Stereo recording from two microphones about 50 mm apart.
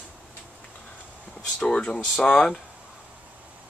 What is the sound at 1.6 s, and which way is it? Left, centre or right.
Speech, centre.